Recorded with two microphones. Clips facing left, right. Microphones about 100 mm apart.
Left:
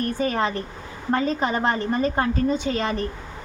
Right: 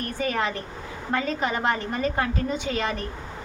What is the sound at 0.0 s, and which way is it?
A woman's voice, 35° left (ahead or behind).